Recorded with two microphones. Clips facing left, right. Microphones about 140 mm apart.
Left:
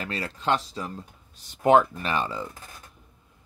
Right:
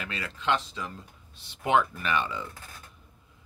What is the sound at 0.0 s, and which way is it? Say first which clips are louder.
Speech: left 3 dB; 40° left (ahead or behind).